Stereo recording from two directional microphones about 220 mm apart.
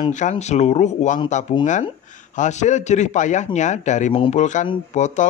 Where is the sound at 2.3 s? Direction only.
35° left (ahead or behind).